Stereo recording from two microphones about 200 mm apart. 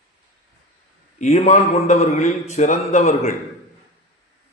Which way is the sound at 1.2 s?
35° left (ahead or behind).